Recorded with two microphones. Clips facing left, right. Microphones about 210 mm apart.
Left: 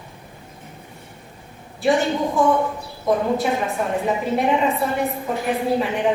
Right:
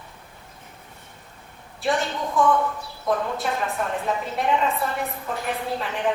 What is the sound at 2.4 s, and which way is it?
Speech, centre (ahead or behind).